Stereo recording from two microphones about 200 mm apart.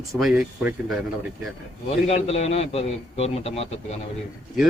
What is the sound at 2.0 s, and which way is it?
A man's voice, 30° left (ahead or behind).